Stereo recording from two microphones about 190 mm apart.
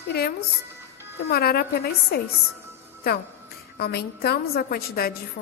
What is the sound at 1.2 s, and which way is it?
Speech, 55° left (ahead or behind).